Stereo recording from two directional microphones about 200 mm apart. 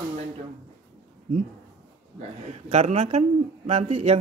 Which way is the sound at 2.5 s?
35° right (ahead or behind).